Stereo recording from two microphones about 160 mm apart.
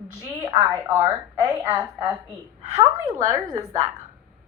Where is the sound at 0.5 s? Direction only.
15° right (ahead or behind).